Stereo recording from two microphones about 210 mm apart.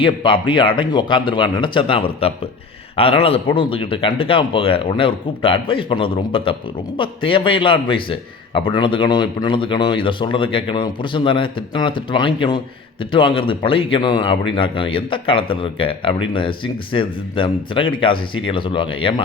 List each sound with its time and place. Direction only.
0.0 s speech: 25° left (ahead or behind)